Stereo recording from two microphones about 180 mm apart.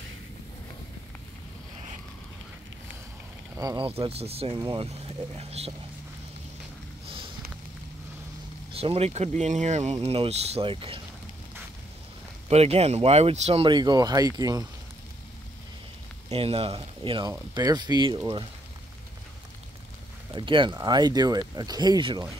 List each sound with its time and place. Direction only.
3.5 s speech: 25° right (ahead or behind)
8.7 s speech: 35° right (ahead or behind)
12.4 s speech: 35° right (ahead or behind)
16.3 s speech: 35° right (ahead or behind)
20.3 s speech: 25° right (ahead or behind)